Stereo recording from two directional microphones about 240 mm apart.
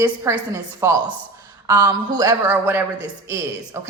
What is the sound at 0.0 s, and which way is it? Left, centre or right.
A woman's voice, centre.